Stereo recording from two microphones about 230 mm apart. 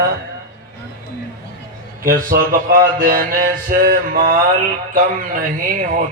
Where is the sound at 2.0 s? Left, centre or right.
Right.